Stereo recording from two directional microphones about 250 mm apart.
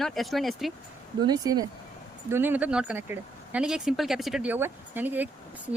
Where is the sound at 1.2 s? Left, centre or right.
Centre.